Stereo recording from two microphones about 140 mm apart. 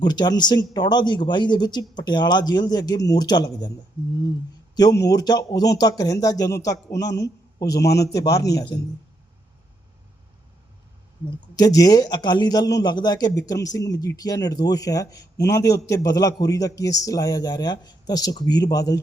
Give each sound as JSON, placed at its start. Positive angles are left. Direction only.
{"t": 0.0, "sound": "speech", "side_deg": 30}
{"t": 4.7, "sound": "a man's voice", "side_deg": 30}
{"t": 11.3, "sound": "a man's voice", "side_deg": 30}